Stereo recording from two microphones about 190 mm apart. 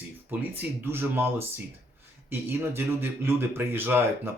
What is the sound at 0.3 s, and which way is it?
Speech, 10° right (ahead or behind).